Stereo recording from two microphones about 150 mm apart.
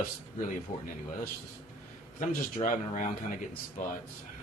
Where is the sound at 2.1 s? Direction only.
55° left (ahead or behind).